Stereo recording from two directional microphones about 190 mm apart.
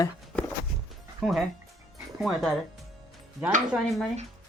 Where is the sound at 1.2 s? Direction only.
Centre (ahead or behind).